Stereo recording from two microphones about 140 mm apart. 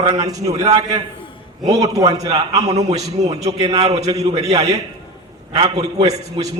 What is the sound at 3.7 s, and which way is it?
Speech, 45° right (ahead or behind).